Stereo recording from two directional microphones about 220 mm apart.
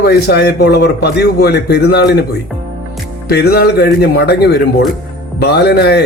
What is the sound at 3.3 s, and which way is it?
A man's voice, 45° left (ahead or behind).